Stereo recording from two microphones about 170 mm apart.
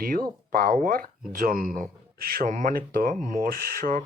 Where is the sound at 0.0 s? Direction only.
60° right (ahead or behind).